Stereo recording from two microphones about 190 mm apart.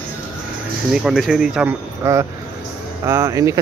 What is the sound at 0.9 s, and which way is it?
Speech, 5° right (ahead or behind).